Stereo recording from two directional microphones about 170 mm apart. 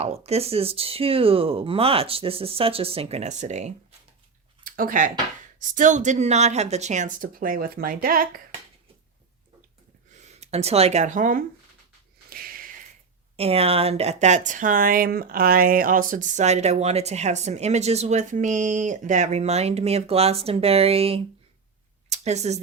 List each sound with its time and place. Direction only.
0.0 s speech: 35° right (ahead or behind)
4.6 s speech: 55° right (ahead or behind)
10.1 s speech: 40° right (ahead or behind)
12.3 s a sound: 60° right (ahead or behind)
13.3 s speech: 35° right (ahead or behind)